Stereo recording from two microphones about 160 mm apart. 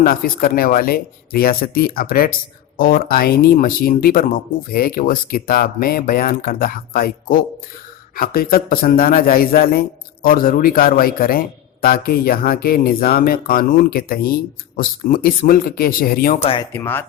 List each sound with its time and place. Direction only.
0.0 s a man's voice: 65° left (ahead or behind)
16.4 s speech: 35° left (ahead or behind)
16.7 s speech: 15° left (ahead or behind)